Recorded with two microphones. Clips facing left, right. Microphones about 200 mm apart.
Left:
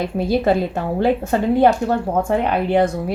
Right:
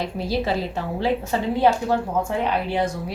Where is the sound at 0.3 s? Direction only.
50° left (ahead or behind).